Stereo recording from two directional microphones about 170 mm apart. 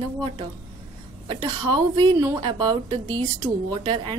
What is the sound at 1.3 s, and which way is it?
Speech, 25° right (ahead or behind).